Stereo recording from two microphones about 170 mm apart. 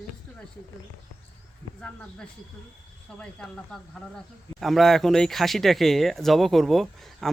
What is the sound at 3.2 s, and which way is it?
Speech, 5° left (ahead or behind).